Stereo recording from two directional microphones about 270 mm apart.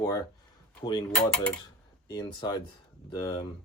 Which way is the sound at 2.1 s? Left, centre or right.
Centre.